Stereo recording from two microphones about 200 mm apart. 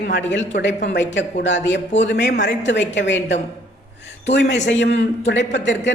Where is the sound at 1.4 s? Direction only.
65° left (ahead or behind).